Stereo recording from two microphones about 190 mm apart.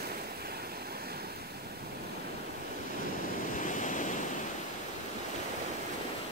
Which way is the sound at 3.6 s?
40° left (ahead or behind).